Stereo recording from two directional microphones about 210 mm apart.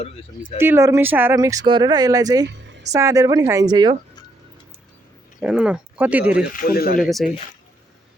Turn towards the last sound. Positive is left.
turn(degrees=0)  # may be behind; listen again after turning